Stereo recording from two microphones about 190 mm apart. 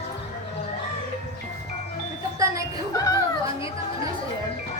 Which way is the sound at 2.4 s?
15° right (ahead or behind).